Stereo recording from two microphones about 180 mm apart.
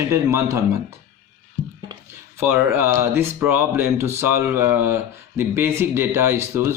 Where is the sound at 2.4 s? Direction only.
10° right (ahead or behind).